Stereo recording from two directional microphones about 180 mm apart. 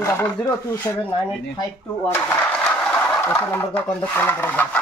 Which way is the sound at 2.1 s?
10° left (ahead or behind).